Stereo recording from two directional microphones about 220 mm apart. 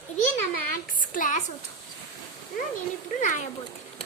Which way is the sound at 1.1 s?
35° left (ahead or behind).